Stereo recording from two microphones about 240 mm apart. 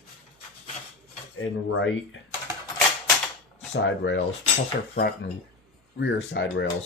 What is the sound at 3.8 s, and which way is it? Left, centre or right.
Speech, left.